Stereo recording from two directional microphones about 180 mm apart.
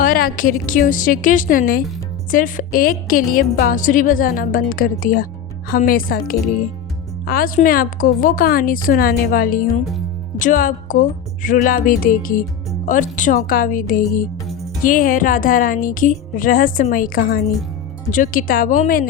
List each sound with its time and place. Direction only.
0.0 s a woman's voice: 50° left (ahead or behind)